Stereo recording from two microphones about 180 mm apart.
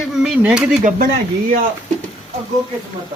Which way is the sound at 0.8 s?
45° right (ahead or behind).